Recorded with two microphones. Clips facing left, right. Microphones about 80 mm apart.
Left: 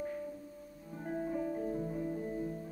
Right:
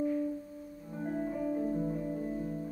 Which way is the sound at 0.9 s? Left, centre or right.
Centre.